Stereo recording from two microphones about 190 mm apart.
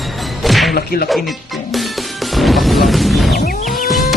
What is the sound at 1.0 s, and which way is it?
Music, centre (ahead or behind).